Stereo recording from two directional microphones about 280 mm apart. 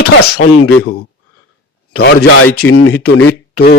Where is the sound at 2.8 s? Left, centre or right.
Left.